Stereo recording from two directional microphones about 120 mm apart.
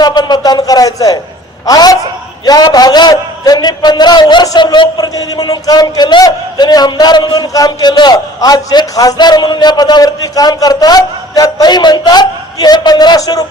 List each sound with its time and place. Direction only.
0.0 s a man's voice: 35° left (ahead or behind)